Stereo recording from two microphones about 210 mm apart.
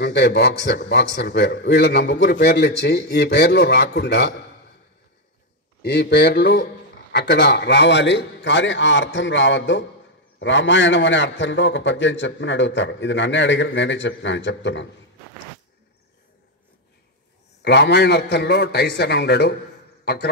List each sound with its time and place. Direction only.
0.0 s a man's voice: 55° left (ahead or behind)
5.8 s a man's voice: 50° left (ahead or behind)
17.6 s a man's voice: 55° left (ahead or behind)